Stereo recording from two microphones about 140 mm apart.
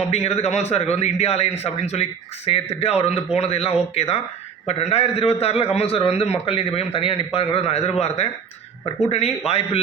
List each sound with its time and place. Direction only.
0.1 s a man's voice: 50° left (ahead or behind)